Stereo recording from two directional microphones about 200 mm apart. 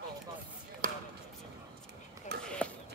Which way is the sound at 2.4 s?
5° left (ahead or behind).